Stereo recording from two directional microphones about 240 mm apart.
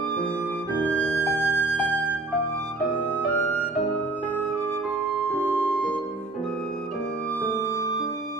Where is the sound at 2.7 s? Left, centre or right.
Centre.